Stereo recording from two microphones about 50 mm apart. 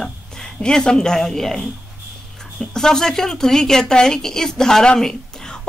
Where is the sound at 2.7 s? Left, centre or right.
Centre.